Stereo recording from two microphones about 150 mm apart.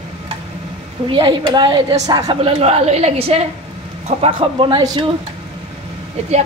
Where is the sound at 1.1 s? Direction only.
35° right (ahead or behind).